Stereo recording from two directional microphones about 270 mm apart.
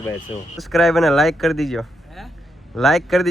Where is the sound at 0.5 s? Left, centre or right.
Centre.